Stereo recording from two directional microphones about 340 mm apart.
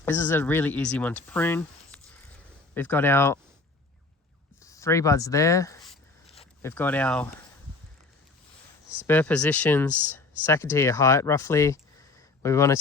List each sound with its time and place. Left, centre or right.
0.0 s speech: centre
4.6 s a sound: centre
6.3 s speech: centre
9.0 s speech: centre